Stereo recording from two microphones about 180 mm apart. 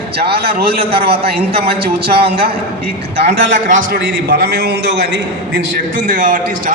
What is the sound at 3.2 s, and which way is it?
A man's voice, 45° right (ahead or behind).